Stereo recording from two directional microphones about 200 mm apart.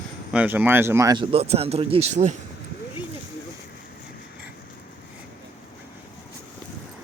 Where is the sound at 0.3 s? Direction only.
10° right (ahead or behind); by 2.3 s 30° right (ahead or behind).